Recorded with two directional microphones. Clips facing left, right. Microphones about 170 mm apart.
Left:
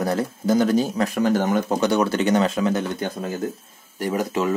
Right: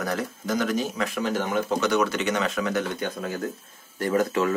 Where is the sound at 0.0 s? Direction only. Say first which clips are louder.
Left 6 dB; 30° left (ahead or behind).